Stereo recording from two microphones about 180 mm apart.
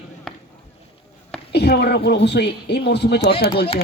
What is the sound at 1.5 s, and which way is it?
Speech, 65° left (ahead or behind).